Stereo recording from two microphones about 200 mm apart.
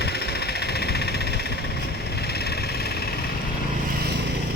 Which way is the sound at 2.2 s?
55° left (ahead or behind).